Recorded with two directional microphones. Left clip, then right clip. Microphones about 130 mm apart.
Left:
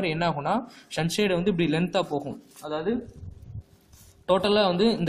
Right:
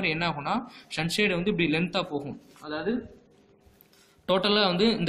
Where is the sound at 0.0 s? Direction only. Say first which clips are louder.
Left 2 dB; 50° left (ahead or behind).